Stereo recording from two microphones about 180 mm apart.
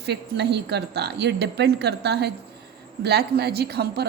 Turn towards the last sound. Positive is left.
turn(degrees=-65)  # may be behind; listen again after turning